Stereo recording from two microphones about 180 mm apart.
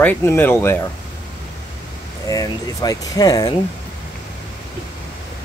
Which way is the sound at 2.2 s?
20° left (ahead or behind).